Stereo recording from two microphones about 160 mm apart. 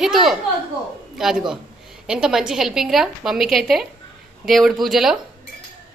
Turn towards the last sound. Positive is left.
turn(degrees=0)  # may be behind; listen again after turning